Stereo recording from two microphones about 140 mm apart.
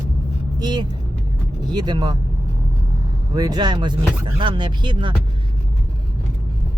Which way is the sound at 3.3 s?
30° right (ahead or behind).